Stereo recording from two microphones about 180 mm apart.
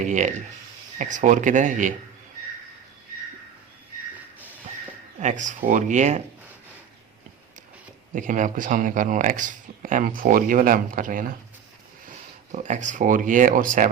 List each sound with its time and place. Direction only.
0.0 s speech: 45° right (ahead or behind)
5.2 s speech: 45° right (ahead or behind)
8.1 s speech: 45° right (ahead or behind)
12.5 s speech: 40° right (ahead or behind)